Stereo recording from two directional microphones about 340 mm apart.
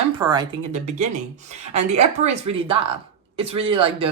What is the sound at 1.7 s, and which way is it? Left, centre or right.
Speech, centre.